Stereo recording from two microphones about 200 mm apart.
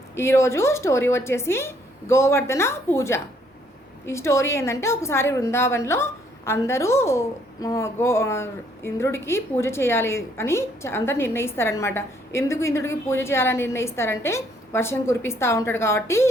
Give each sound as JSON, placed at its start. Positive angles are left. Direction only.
{"t": 0.2, "sound": "a woman's voice", "side_deg": 15}